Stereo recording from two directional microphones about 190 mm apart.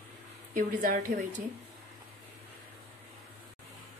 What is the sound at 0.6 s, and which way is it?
Speech, 45° right (ahead or behind).